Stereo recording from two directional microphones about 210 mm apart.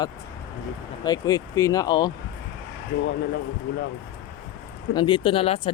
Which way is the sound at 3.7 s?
55° left (ahead or behind).